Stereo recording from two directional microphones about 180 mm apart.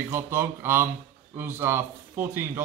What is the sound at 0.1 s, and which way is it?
A man's voice, 15° right (ahead or behind).